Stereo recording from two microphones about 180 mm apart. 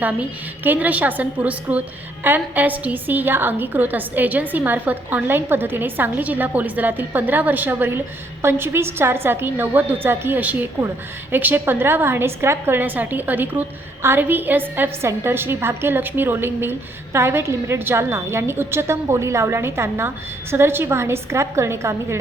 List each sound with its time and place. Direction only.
0.0 s a woman's voice: 10° right (ahead or behind)